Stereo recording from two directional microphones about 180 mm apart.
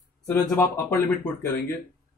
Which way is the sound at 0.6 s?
10° left (ahead or behind).